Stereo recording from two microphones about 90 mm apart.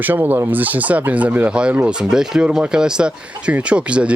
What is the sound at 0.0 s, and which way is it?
Speech, 20° right (ahead or behind).